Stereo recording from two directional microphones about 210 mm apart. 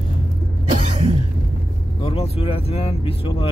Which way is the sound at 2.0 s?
25° left (ahead or behind).